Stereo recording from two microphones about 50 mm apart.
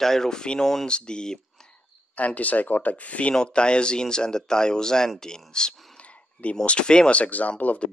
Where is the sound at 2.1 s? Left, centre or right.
Left.